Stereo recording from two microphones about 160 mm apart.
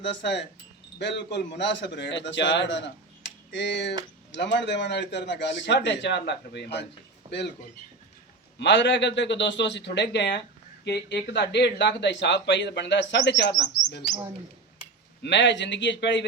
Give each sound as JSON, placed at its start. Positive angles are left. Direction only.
{"t": 0.0, "sound": "speech", "side_deg": 90}
{"t": 8.5, "sound": "speech", "side_deg": 90}
{"t": 15.2, "sound": "speech", "side_deg": 90}